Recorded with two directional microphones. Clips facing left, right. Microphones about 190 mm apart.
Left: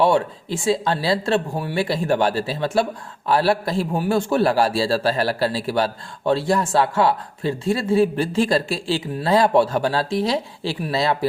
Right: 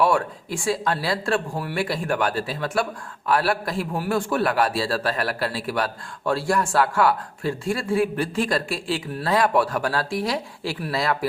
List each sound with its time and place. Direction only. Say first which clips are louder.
0.0 s a man's voice: left 3 dB; 25° left (ahead or behind)